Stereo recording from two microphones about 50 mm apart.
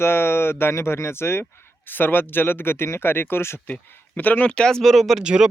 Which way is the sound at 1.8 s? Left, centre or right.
Left.